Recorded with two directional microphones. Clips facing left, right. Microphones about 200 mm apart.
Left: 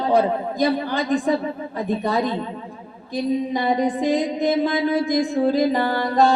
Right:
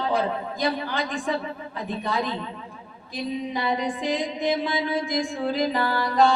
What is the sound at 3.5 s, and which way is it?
Speech, 40° left (ahead or behind).